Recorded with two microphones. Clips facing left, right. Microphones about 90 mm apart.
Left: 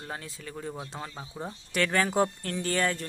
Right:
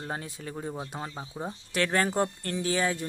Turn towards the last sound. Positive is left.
turn(degrees=-5)  # may be behind; listen again after turning